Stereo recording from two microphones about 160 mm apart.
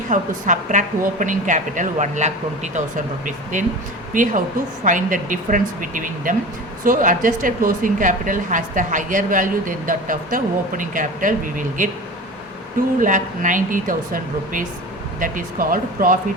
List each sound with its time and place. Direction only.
0.1 s a woman's voice: 50° right (ahead or behind)
4.1 s a woman's voice: 55° right (ahead or behind)
13.0 s a woman's voice: 55° right (ahead or behind)